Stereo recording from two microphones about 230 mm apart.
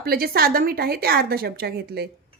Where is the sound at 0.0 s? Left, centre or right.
Right.